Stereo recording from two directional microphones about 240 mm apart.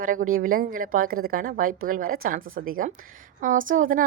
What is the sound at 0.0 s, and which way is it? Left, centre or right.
A woman's voice, right.